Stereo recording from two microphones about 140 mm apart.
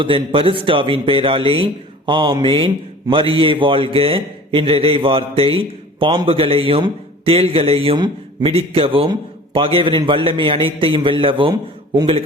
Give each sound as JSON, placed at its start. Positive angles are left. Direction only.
{"t": 0.0, "sound": "speech", "side_deg": -40}
{"t": 8.4, "sound": "speech", "side_deg": -45}